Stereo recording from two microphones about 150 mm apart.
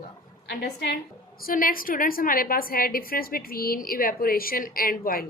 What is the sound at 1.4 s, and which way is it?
A woman's voice, 70° left (ahead or behind).